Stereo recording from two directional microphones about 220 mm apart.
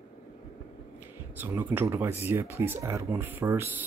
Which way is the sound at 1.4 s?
10° right (ahead or behind).